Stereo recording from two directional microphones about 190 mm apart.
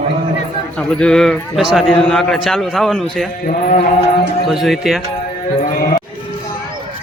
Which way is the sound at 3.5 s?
40° left (ahead or behind).